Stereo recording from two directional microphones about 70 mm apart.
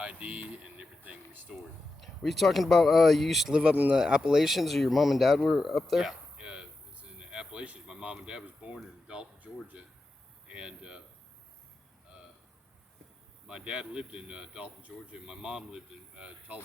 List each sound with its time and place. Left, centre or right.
0.0 s speech: right
2.0 s speech: centre
3.5 s speech: centre
6.0 s a sound: centre
9.4 s speech: right
13.5 s speech: centre